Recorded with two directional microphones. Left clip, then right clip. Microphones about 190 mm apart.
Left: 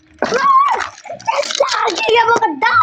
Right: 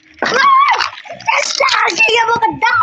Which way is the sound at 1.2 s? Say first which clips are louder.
Right 2 dB; 55° left (ahead or behind).